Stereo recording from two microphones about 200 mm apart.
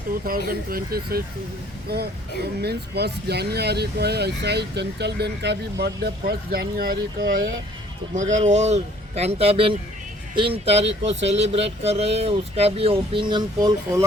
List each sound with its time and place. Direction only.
0.3 s speech: 45° right (ahead or behind); by 14.0 s 20° right (ahead or behind)